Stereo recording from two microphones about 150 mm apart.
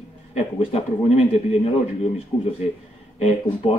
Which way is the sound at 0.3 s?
45° left (ahead or behind).